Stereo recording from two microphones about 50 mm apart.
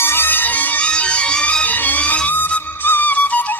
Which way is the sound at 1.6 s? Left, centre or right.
Left.